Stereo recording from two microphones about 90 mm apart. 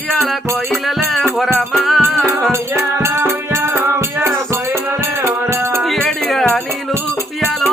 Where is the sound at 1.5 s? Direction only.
Centre (ahead or behind).